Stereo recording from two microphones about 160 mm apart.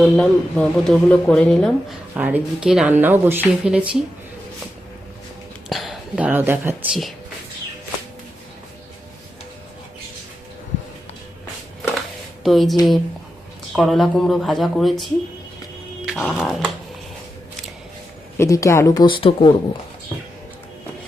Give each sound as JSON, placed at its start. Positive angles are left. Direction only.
{"t": 0.0, "sound": "speech", "side_deg": 5}
{"t": 2.1, "sound": "speech", "side_deg": -10}
{"t": 5.6, "sound": "speech", "side_deg": 0}
{"t": 12.4, "sound": "speech", "side_deg": 0}
{"t": 13.7, "sound": "speech", "side_deg": 0}
{"t": 18.3, "sound": "speech", "side_deg": 20}